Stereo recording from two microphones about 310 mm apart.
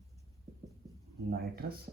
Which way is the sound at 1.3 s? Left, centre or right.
Right.